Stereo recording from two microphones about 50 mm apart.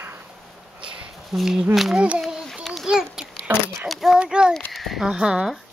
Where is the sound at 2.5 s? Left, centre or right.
Centre.